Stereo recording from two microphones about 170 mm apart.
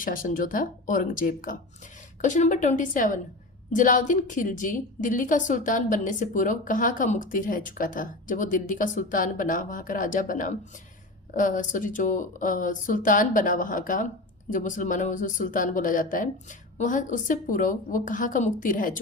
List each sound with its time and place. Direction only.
0.0 s a woman's voice: 55° left (ahead or behind)